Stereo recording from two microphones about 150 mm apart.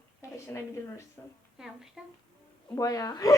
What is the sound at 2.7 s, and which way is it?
Speech, 20° left (ahead or behind).